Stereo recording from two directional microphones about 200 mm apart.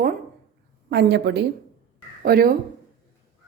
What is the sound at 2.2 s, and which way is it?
Speech, 50° right (ahead or behind).